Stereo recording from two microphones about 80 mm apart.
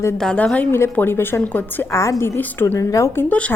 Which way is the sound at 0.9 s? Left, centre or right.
Left.